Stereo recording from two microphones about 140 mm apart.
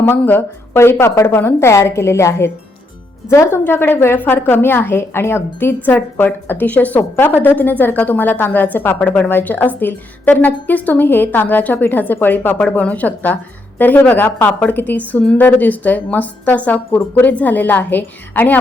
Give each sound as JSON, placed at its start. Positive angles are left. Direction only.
{"t": 0.0, "sound": "a woman's voice", "side_deg": 15}